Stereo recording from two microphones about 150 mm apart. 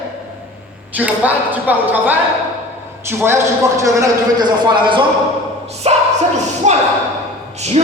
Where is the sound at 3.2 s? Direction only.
15° right (ahead or behind).